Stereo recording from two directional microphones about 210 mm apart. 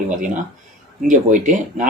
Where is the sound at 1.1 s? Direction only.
35° right (ahead or behind).